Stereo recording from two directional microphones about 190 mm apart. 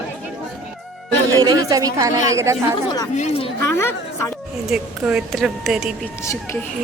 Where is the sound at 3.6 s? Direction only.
15° left (ahead or behind).